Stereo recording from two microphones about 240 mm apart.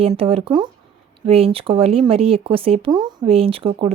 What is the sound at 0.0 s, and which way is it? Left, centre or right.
Speech, right.